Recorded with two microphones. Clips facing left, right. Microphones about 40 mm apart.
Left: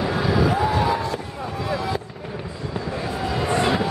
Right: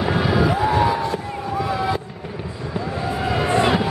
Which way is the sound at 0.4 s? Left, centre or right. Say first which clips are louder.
Right 2 dB; centre.